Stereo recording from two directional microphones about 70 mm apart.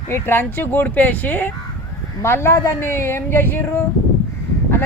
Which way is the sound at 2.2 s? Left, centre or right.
Left.